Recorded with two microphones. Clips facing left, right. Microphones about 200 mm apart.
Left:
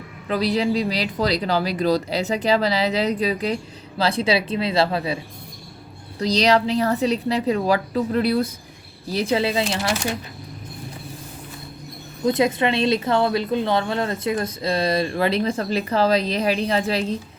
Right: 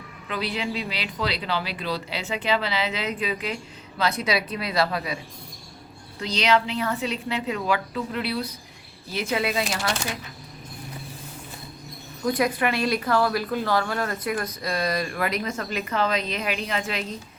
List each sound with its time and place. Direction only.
0.3 s speech: 40° left (ahead or behind)
9.1 s a woman's voice: 30° left (ahead or behind)
12.2 s a woman's voice: 25° left (ahead or behind)